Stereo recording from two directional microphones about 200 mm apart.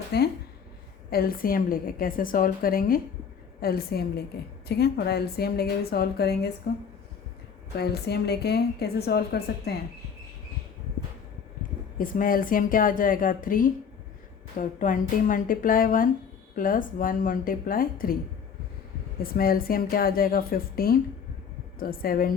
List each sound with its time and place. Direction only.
0.1 s a woman's voice: 55° left (ahead or behind)
7.8 s a woman's voice: 55° left (ahead or behind)
11.9 s a woman's voice: 45° left (ahead or behind)
19.2 s a woman's voice: 50° left (ahead or behind)